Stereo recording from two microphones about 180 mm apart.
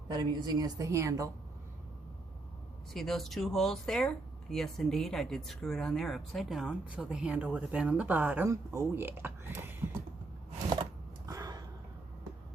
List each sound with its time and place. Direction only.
0.1 s a woman's voice: 20° right (ahead or behind)
2.9 s speech: centre (ahead or behind)
11.3 s a sound: 20° right (ahead or behind)